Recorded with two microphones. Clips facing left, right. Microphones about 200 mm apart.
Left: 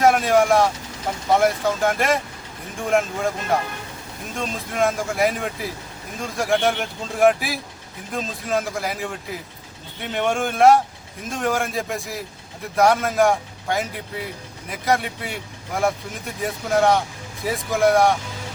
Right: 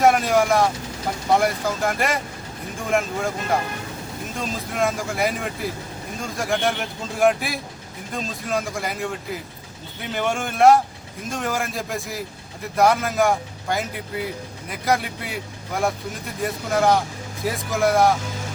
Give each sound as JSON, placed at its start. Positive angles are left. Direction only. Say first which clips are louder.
{"t": 0.0, "sound": "speech", "louder": "left 1 dB", "side_deg": 0}